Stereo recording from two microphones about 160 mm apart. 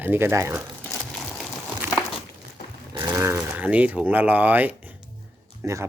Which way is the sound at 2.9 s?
20° right (ahead or behind).